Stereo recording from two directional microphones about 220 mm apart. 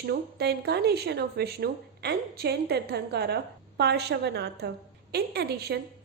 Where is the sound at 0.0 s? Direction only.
45° right (ahead or behind).